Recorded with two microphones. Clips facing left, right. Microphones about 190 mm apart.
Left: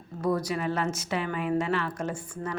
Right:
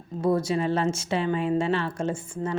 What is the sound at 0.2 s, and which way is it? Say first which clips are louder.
Speech: right 4 dB; 25° right (ahead or behind).